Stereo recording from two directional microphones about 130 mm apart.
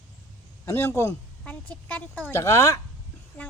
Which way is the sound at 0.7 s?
20° left (ahead or behind).